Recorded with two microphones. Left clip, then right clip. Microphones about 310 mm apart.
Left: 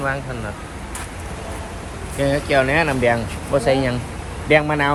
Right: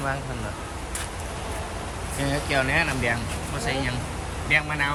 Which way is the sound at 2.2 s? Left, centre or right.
Centre.